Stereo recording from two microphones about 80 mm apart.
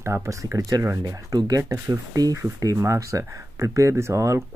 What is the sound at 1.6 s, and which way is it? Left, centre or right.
Speech, right.